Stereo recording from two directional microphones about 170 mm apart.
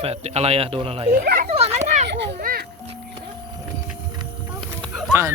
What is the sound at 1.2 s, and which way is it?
Speech, 55° right (ahead or behind).